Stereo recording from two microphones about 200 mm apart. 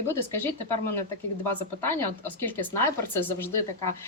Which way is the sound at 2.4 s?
10° left (ahead or behind).